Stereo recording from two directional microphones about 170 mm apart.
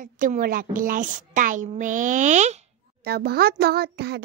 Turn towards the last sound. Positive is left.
turn(degrees=-70)  # may be behind; listen again after turning